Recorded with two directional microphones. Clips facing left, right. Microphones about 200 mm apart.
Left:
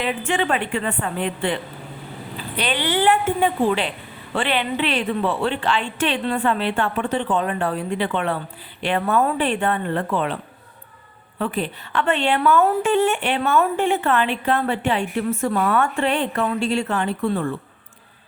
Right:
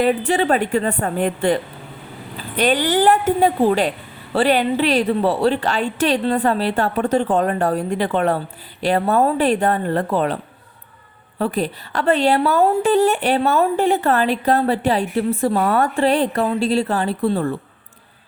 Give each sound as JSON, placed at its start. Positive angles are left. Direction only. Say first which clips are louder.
{"t": 0.0, "sound": "a woman's voice", "louder": "right 6 dB", "side_deg": -40}